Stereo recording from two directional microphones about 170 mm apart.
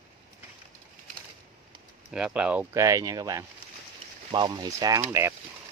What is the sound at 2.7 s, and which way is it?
Speech, 20° right (ahead or behind).